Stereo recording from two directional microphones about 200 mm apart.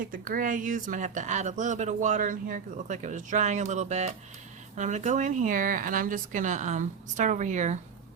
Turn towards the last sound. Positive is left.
turn(degrees=-35)  # may be behind; listen again after turning